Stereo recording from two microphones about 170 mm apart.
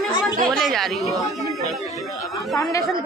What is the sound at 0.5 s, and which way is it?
Speech, centre (ahead or behind).